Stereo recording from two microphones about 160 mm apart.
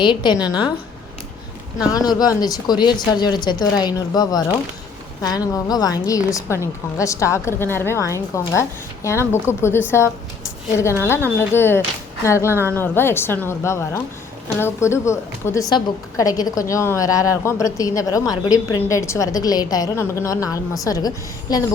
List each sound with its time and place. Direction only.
0.0 s a woman's voice: 30° left (ahead or behind)
1.9 s a woman's voice: 25° left (ahead or behind)
11.3 s a woman's voice: 15° left (ahead or behind)